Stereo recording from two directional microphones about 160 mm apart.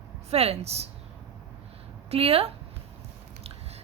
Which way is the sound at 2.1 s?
40° right (ahead or behind).